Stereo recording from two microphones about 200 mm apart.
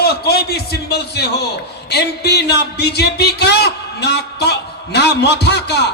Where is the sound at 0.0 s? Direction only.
55° left (ahead or behind).